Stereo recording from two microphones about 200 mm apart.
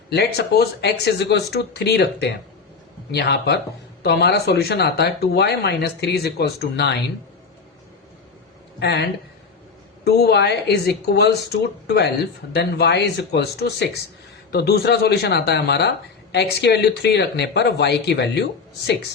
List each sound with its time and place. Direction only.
0.1 s speech: 55° left (ahead or behind)
8.8 s speech: 55° left (ahead or behind)